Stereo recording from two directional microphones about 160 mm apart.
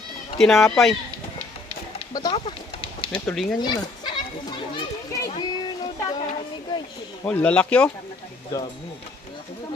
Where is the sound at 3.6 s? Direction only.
30° left (ahead or behind).